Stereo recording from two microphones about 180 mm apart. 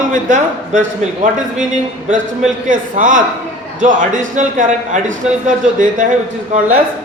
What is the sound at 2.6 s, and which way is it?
A man's voice, 50° right (ahead or behind).